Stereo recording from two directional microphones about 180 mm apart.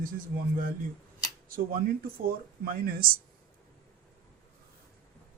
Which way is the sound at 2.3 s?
55° right (ahead or behind).